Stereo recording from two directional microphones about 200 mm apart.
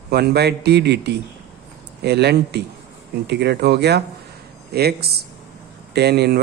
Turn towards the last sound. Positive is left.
turn(degrees=-55)  # may be behind; listen again after turning